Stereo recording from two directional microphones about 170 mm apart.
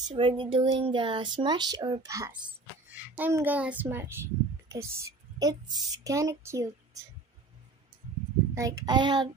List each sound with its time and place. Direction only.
0.1 s a child's voice: 30° right (ahead or behind)
8.5 s speech: 20° right (ahead or behind)